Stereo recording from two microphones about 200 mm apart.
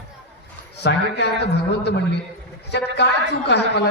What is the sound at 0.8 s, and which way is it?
Speech, 55° left (ahead or behind).